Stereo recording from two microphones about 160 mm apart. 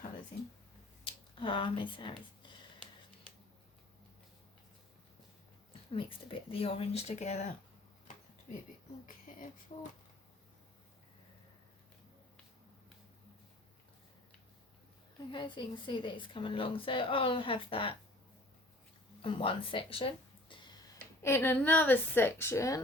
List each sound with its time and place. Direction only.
1.4 s speech: 35° left (ahead or behind)
5.9 s speech: 35° left (ahead or behind)
9.0 s speech: 55° left (ahead or behind)
9.7 s speech: 40° left (ahead or behind)
15.3 s speech: 30° left (ahead or behind)
19.2 s speech: 35° left (ahead or behind)
21.2 s a woman's voice: 15° left (ahead or behind)